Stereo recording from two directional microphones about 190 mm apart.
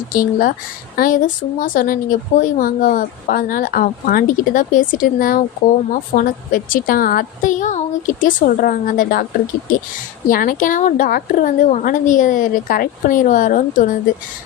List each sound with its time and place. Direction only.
0.1 s speech: 45° left (ahead or behind)
10.2 s speech: 45° left (ahead or behind)